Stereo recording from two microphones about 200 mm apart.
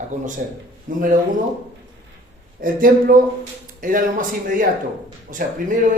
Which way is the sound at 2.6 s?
45° right (ahead or behind).